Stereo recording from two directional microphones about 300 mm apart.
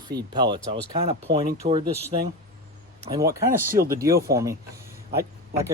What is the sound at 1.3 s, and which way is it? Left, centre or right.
Speech, centre.